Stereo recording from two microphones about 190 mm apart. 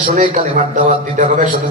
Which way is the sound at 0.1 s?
40° right (ahead or behind).